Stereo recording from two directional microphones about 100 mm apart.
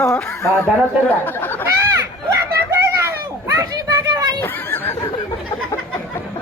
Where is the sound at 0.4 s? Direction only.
25° left (ahead or behind).